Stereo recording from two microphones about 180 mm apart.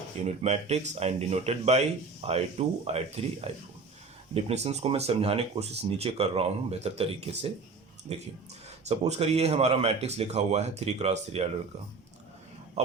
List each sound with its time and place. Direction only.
0.2 s speech: 40° right (ahead or behind)